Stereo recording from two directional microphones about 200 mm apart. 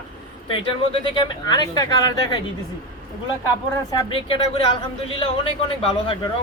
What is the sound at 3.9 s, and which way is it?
Speech, 20° left (ahead or behind).